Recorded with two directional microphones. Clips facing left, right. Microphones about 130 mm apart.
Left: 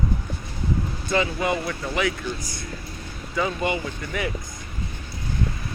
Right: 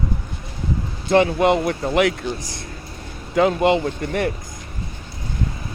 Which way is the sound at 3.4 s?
80° right.